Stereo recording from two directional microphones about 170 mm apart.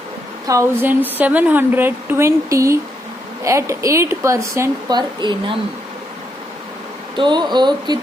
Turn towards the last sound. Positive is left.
turn(degrees=-25)  # may be behind; listen again after turning